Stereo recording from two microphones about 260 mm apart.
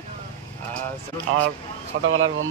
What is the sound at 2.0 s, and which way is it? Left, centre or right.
Speech, right.